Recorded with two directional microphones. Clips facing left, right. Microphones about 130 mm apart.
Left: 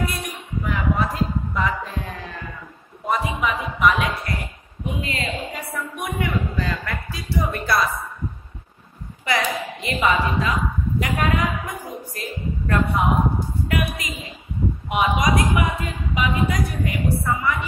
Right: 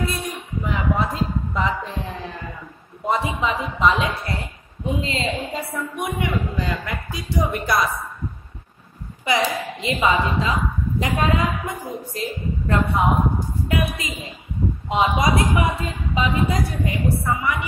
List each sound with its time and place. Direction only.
0.0 s a sound: 25° right (ahead or behind)
3.1 s speech: 25° right (ahead or behind)
9.2 s speech: 20° right (ahead or behind)